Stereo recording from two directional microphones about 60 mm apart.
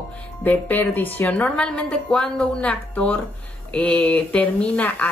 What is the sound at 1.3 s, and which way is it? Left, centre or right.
A woman's voice, centre.